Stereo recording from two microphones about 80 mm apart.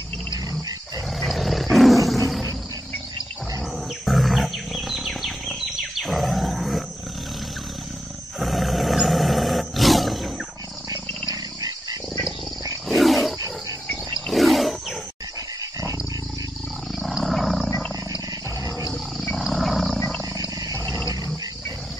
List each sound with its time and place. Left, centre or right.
0.5 s dog: right
1.2 s roar: centre
4.0 s wild animals: centre
8.4 s roar: centre
12.8 s wild animals: centre
17.0 s roaring cats: centre
19.3 s roaring cats: centre